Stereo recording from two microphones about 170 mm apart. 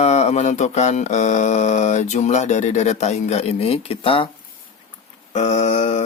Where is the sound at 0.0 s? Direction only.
40° left (ahead or behind).